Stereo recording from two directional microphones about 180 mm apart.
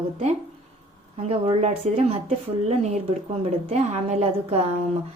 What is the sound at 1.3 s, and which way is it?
Speech, 35° right (ahead or behind).